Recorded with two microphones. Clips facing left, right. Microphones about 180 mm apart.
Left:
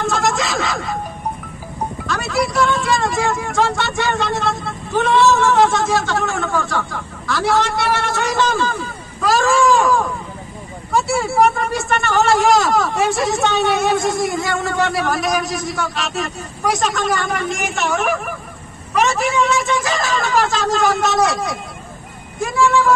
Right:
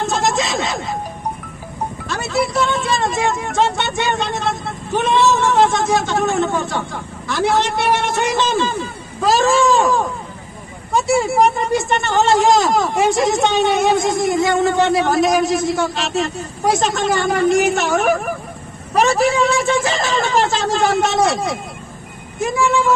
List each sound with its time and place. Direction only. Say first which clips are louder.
0.1 s snicker: right 1 dB; 25° right (ahead or behind)
2.0 s speech: right 1 dB; 25° right (ahead or behind)
9.2 s a sound: right 1 dB; 25° right (ahead or behind)
10.9 s speech: right 2 dB; 20° right (ahead or behind)